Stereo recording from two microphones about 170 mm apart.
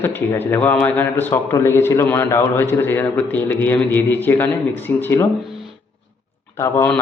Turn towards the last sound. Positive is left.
turn(degrees=15)  # may be behind; listen again after turning